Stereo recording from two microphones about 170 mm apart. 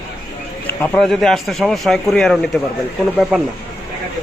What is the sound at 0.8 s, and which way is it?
A man's voice, centre (ahead or behind).